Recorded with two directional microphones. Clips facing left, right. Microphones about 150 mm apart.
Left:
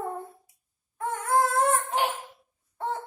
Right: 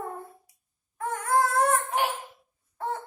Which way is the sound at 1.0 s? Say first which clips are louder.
Even; 25° left (ahead or behind).